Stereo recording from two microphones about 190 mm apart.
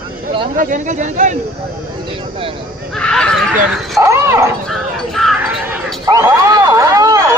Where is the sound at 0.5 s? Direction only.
45° right (ahead or behind).